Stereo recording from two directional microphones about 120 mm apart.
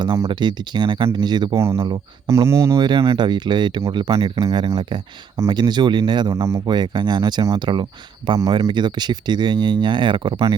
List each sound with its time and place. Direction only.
0.3 s speech: 40° right (ahead or behind)
1.5 s speech: 20° right (ahead or behind)
2.8 s speech: 45° right (ahead or behind)
4.4 s speech: 35° right (ahead or behind)
6.3 s speech: 25° right (ahead or behind)
6.7 s speech: 35° right (ahead or behind)